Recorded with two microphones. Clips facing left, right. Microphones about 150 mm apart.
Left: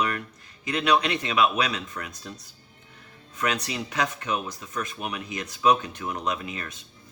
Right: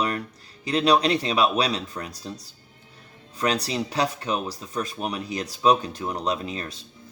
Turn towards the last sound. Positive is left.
turn(degrees=-35)  # may be behind; listen again after turning